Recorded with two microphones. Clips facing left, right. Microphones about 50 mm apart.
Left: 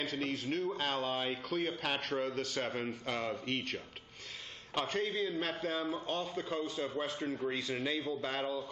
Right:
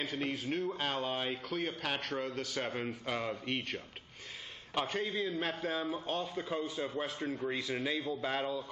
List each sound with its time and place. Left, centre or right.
0.0 s a man's voice: centre